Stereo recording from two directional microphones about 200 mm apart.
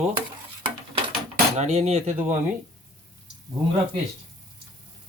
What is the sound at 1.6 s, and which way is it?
Speech, 30° right (ahead or behind).